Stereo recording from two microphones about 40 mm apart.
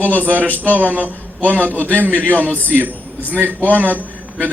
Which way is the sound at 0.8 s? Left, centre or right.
Right.